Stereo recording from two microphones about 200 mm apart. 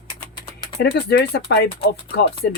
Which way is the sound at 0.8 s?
55° left (ahead or behind).